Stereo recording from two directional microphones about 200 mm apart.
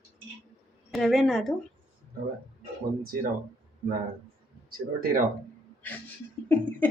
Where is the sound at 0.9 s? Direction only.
Centre (ahead or behind).